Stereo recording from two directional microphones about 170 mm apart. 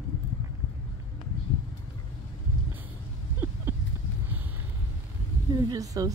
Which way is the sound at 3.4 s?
10° right (ahead or behind).